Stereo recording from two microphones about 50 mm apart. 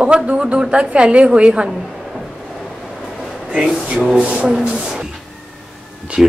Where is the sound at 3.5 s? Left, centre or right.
Centre.